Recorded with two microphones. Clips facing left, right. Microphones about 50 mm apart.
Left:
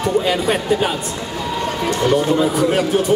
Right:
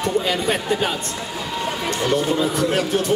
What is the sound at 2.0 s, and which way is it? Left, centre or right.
A man's voice, centre.